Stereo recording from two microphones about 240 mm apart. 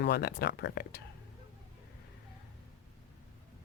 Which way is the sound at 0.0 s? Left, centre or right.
Left.